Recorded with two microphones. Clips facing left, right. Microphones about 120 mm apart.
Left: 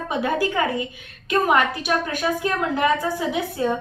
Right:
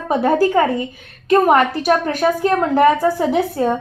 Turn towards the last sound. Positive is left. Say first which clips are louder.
# right 6 dB
turn(degrees=-40)  # may be behind; listen again after turning